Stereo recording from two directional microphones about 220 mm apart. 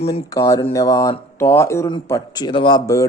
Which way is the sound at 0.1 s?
15° left (ahead or behind).